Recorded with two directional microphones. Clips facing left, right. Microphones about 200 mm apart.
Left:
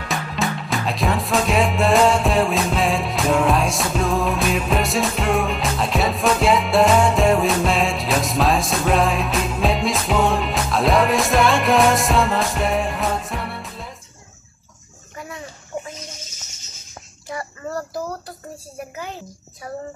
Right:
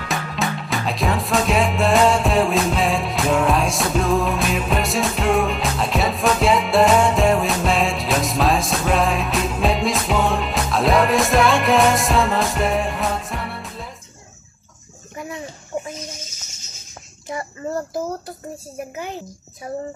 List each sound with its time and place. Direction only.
0.1 s music: centre (ahead or behind)
17.3 s speech: 25° right (ahead or behind)
19.6 s speech: 20° right (ahead or behind)